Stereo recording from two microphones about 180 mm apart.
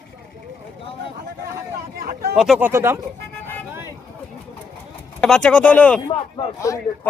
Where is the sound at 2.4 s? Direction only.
5° right (ahead or behind).